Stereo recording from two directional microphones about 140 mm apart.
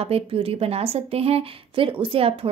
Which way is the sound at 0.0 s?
45° right (ahead or behind).